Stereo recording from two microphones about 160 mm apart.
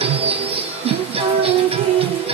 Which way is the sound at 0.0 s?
35° right (ahead or behind).